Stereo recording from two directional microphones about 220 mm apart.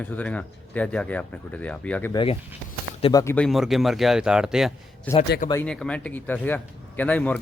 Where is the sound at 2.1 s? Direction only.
20° left (ahead or behind).